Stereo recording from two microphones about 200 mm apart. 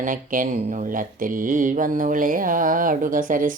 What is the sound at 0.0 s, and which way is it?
Mantra, 40° right (ahead or behind).